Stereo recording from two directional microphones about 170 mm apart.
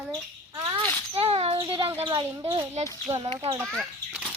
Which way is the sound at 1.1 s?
35° right (ahead or behind).